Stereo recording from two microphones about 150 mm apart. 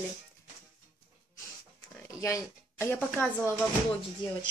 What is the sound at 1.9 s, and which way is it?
A woman's voice, 20° left (ahead or behind).